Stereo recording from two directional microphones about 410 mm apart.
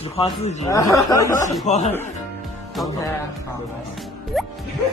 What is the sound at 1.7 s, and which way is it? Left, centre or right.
Speech, centre.